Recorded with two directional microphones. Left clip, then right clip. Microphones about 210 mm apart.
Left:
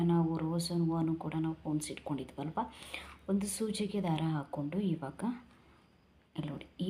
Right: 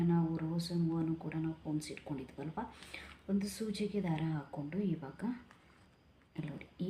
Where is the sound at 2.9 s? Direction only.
30° left (ahead or behind).